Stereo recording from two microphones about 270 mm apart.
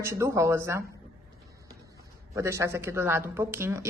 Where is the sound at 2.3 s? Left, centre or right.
Centre.